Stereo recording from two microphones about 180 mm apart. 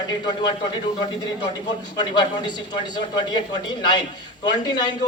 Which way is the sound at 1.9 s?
25° left (ahead or behind).